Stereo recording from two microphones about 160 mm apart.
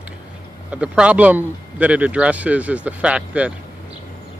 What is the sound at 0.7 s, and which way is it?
Speech, 5° right (ahead or behind).